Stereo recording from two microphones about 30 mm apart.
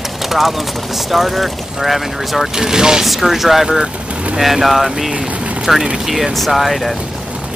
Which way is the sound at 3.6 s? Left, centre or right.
Right.